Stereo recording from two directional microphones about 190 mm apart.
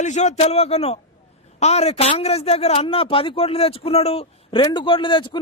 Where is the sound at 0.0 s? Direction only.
40° left (ahead or behind).